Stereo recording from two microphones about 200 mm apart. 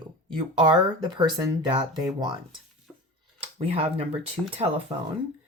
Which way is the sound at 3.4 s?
30° right (ahead or behind).